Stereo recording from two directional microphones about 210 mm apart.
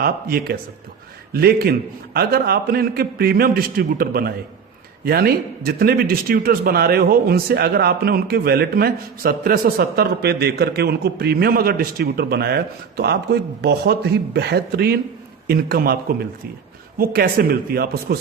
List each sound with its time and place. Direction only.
0.0 s a man's voice: 45° right (ahead or behind)